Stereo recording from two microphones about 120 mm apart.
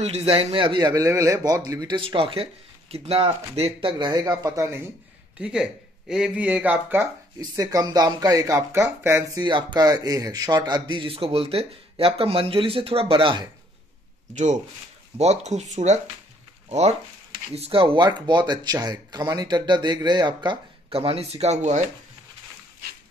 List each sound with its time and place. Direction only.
0.0 s speech: 60° right (ahead or behind); by 2.0 s 30° right (ahead or behind)
2.0 s speech: 50° right (ahead or behind)
4.0 s speech: 35° right (ahead or behind)
5.4 s speech: 5° right (ahead or behind)
7.3 s speech: 30° right (ahead or behind)
9.4 s speech: 40° right (ahead or behind)
14.3 s speech: 80° right
15.1 s speech: 65° right (ahead or behind)
17.6 s speech: 50° right (ahead or behind); by 21.8 s 80° right